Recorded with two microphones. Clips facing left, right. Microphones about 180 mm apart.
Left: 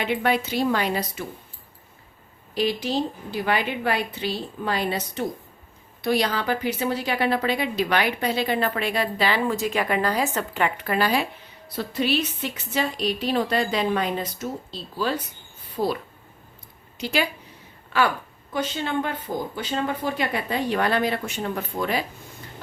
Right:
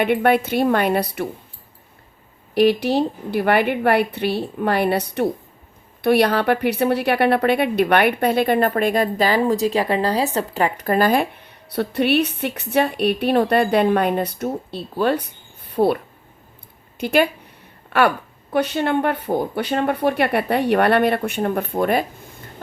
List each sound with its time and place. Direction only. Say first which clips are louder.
0.0 s a woman's voice: right 6 dB; 55° right (ahead or behind)
2.6 s a woman's voice: right 8 dB; 65° right (ahead or behind)
17.0 s a woman's voice: right 8 dB; 55° right (ahead or behind)
18.5 s a woman's voice: right 7 dB; 65° right (ahead or behind)